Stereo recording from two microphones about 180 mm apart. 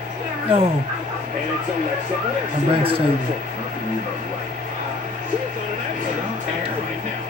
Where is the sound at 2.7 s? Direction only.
30° right (ahead or behind).